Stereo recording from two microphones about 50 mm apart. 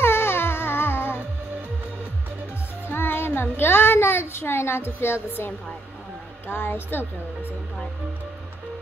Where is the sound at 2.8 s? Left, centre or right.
Left.